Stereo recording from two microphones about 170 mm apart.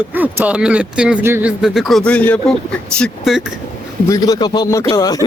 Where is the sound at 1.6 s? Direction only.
Centre (ahead or behind).